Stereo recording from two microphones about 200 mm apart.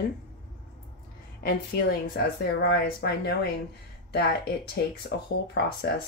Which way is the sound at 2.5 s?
55° left (ahead or behind).